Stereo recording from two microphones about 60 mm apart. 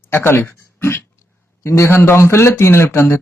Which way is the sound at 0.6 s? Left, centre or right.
Left.